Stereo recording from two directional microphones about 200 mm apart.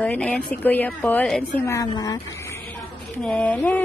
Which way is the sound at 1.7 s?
15° left (ahead or behind).